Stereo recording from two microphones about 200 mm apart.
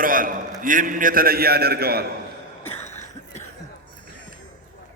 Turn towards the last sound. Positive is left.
turn(degrees=35)  # may be behind; listen again after turning